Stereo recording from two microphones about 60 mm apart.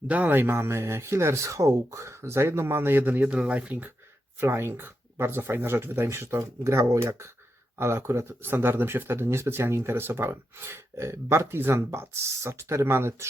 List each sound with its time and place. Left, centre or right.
0.1 s speech: right
3.2 s speech: centre
4.4 s speech: right
7.8 s speech: right